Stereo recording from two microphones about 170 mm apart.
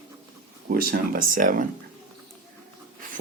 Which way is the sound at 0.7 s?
65° right (ahead or behind).